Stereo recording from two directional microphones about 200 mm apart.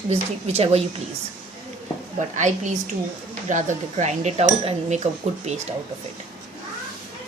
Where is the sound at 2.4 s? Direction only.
35° right (ahead or behind).